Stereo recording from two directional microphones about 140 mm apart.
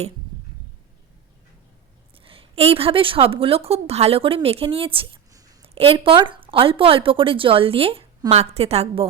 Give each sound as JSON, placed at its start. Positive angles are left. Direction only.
{"t": 2.1, "sound": "a woman's voice", "side_deg": -40}
{"t": 5.3, "sound": "a sound", "side_deg": -25}
{"t": 5.6, "sound": "a woman's voice", "side_deg": -40}